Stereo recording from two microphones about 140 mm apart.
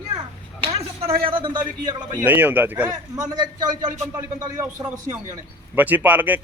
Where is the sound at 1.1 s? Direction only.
40° right (ahead or behind).